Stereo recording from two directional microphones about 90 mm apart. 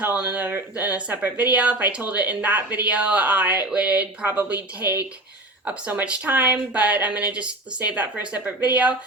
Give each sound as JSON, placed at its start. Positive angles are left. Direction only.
{"t": 0.0, "sound": "speech", "side_deg": -15}
{"t": 5.6, "sound": "speech", "side_deg": -15}